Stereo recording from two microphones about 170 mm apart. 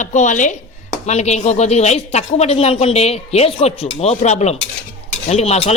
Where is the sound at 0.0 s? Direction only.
45° left (ahead or behind).